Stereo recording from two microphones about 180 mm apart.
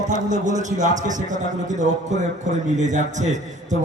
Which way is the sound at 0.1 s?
45° right (ahead or behind).